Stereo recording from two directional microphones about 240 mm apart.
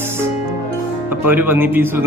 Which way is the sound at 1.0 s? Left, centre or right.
Centre.